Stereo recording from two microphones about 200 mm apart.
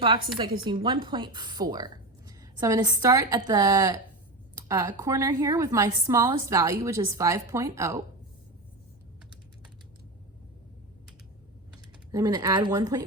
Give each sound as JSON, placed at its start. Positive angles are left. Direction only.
{"t": 0.3, "sound": "a woman's voice", "side_deg": -25}
{"t": 12.1, "sound": "a woman's voice", "side_deg": -20}